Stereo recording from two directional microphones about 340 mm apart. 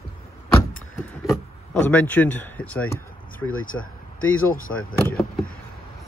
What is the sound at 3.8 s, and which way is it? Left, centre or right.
Speech, left.